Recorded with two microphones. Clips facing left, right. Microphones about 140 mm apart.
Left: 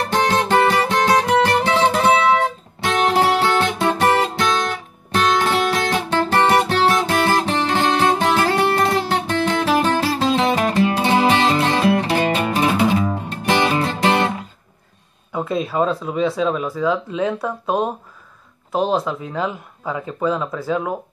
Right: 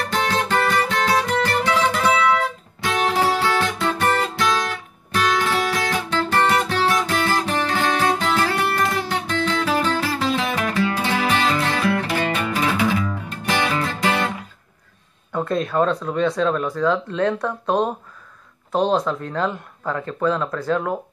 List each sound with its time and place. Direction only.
0.1 s music: 25° left (ahead or behind)
5.1 s guitar: 25° left (ahead or behind)
7.2 s music: 25° left (ahead or behind)
15.3 s speech: 5° left (ahead or behind)